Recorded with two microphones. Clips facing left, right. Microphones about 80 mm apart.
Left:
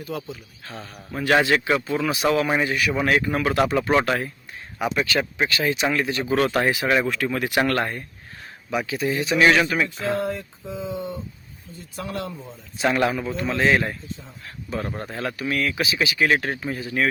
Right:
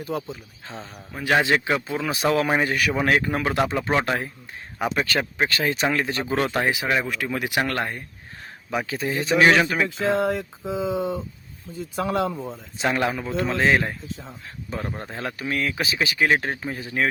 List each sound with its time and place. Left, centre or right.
0.6 s speech: centre
2.0 s speech: right
3.0 s speech: right
3.4 s speech: right
4.9 s speech: right
6.3 s speech: right
8.7 s speech: right
9.9 s speech: right
11.7 s speech: right
12.3 s speech: right
14.8 s speech: right